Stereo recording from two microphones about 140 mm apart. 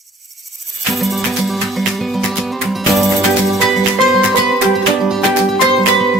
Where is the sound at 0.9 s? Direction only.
Centre (ahead or behind).